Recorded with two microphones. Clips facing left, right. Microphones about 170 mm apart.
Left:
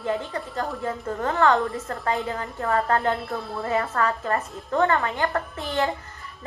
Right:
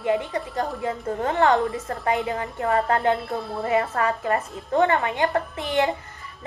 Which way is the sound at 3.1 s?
Centre (ahead or behind).